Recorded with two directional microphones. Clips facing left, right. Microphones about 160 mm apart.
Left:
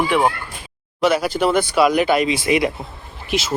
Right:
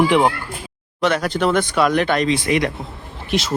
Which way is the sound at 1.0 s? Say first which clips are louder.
Left 1 dB; 5° left (ahead or behind).